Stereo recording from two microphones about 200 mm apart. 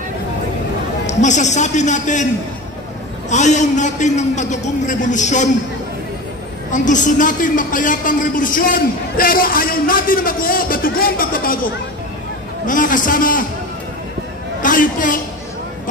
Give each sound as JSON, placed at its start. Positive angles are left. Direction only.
{"t": 1.0, "sound": "a man's voice", "side_deg": 35}
{"t": 3.3, "sound": "a man's voice", "side_deg": 35}
{"t": 6.7, "sound": "a man's voice", "side_deg": 40}
{"t": 14.6, "sound": "a woman's voice", "side_deg": 40}